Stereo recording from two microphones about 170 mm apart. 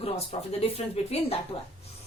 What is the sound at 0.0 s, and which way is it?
A woman's voice, 35° left (ahead or behind).